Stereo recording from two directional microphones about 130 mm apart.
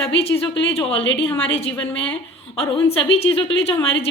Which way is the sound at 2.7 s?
45° left (ahead or behind).